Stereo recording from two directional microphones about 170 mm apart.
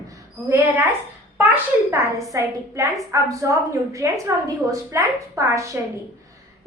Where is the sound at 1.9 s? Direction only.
20° right (ahead or behind).